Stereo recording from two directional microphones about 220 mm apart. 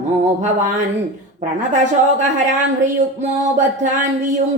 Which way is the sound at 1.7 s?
35° right (ahead or behind).